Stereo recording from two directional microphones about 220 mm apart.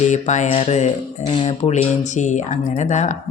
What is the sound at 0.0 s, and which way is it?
Speech, 35° left (ahead or behind).